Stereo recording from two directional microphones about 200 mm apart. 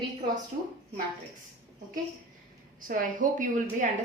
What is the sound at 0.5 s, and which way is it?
Speech, 45° right (ahead or behind).